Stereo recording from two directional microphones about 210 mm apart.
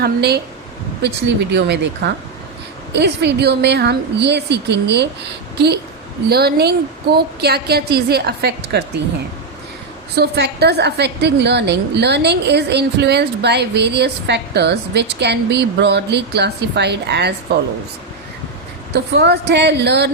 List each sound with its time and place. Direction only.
0.0 s a woman's voice: 50° right (ahead or behind)
1.5 s a woman's voice: 55° right (ahead or behind)
10.2 s a woman's voice: 50° right (ahead or behind)
18.9 s a woman's voice: 55° right (ahead or behind)